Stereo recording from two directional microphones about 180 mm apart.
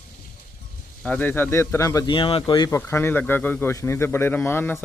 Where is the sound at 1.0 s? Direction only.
10° left (ahead or behind); by 2.7 s 25° left (ahead or behind).